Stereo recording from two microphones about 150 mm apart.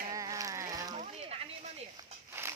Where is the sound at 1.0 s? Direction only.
45° right (ahead or behind).